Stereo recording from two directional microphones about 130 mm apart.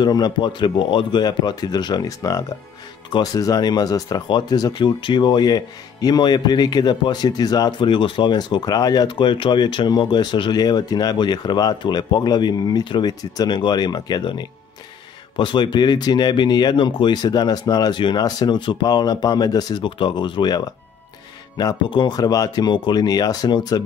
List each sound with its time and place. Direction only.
0.0 s speech: 35° left (ahead or behind)